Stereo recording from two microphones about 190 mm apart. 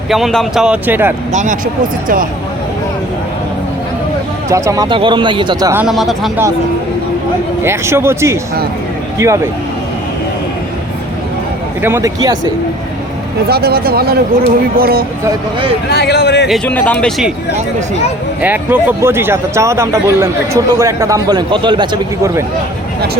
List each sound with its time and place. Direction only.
0.1 s speech: centre (ahead or behind)
1.3 s speech: 40° right (ahead or behind)
4.4 s speech: 15° right (ahead or behind)
5.8 s speech: centre (ahead or behind)
7.6 s speech: 15° right (ahead or behind)
11.8 s speech: 15° right (ahead or behind)
13.5 s speech: 55° right (ahead or behind)
15.9 s speech: 60° left (ahead or behind)
16.5 s speech: 10° left (ahead or behind)
18.4 s speech: 10° right (ahead or behind)